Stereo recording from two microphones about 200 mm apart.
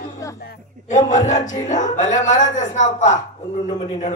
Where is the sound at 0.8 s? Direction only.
35° left (ahead or behind).